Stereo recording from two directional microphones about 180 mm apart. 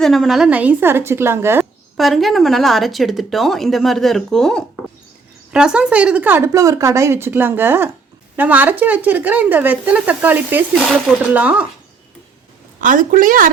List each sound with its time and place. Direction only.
0.0 s speech: centre (ahead or behind)
2.0 s speech: centre (ahead or behind)
10.8 s speech: 5° left (ahead or behind)
12.8 s a woman's voice: 45° right (ahead or behind)